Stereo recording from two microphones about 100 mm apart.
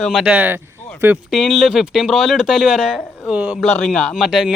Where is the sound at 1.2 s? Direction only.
Centre (ahead or behind).